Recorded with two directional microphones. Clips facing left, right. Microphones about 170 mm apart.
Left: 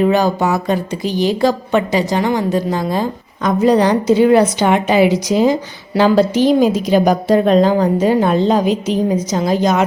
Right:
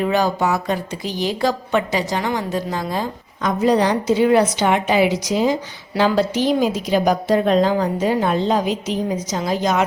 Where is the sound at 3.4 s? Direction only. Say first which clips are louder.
Left 4 dB; 45° left (ahead or behind).